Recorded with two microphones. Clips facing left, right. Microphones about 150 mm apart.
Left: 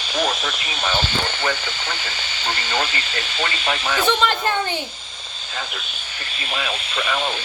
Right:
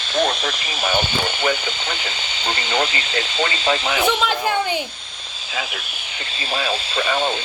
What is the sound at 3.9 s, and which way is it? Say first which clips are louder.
Speech: even; 10° right (ahead or behind).